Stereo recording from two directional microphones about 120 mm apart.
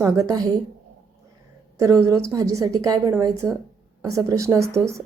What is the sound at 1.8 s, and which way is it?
Speech, 25° right (ahead or behind).